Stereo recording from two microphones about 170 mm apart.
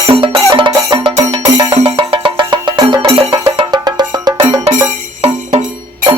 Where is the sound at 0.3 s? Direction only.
25° right (ahead or behind).